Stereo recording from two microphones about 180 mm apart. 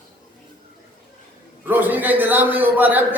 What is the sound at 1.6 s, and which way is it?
A man's voice, 10° right (ahead or behind).